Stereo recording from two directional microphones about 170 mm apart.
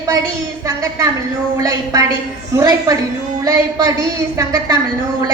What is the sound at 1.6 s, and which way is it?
A woman's voice, 20° right (ahead or behind).